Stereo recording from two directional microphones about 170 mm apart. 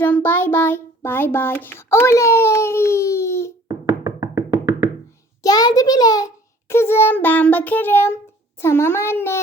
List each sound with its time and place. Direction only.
0.0 s child singing: 10° left (ahead or behind)
4.0 s music: 20° right (ahead or behind)
5.4 s a child's voice: 20° left (ahead or behind)